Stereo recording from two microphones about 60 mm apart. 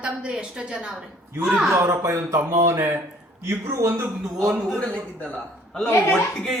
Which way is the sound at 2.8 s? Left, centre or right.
Right.